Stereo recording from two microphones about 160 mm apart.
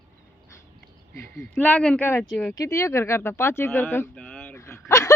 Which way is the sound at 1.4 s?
10° left (ahead or behind).